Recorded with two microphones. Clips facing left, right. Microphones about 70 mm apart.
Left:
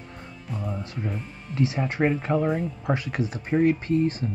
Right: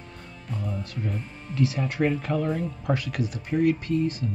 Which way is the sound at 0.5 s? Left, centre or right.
Centre.